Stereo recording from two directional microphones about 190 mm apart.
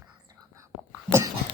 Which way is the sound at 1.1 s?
15° right (ahead or behind).